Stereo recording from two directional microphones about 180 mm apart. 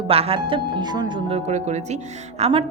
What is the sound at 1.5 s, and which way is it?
Speech, 40° right (ahead or behind).